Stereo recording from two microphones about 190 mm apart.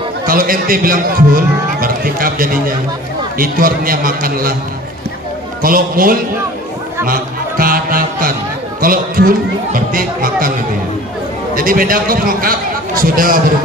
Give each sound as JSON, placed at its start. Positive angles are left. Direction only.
{"t": 0.3, "sound": "a man's voice", "side_deg": -50}
{"t": 5.6, "sound": "a man's voice", "side_deg": -50}
{"t": 7.1, "sound": "a sound", "side_deg": -50}
{"t": 8.8, "sound": "a man's voice", "side_deg": -50}
{"t": 11.5, "sound": "a man's voice", "side_deg": -45}